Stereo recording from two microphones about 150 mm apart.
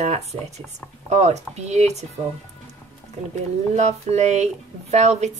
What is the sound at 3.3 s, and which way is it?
Speech, 50° right (ahead or behind).